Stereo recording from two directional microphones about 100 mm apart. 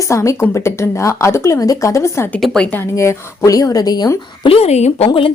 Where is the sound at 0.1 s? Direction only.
30° left (ahead or behind).